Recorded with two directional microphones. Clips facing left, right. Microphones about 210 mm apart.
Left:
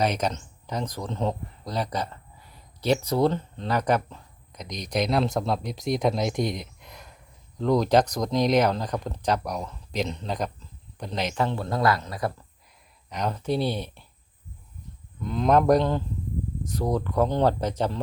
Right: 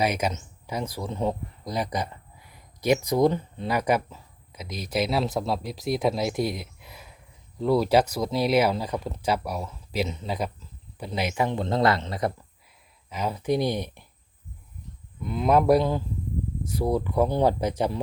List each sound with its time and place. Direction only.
0.0 s speech: 10° right (ahead or behind); by 12.3 s 25° right (ahead or behind)
13.1 s speech: 5° right (ahead or behind)
15.2 s speech: 10° right (ahead or behind)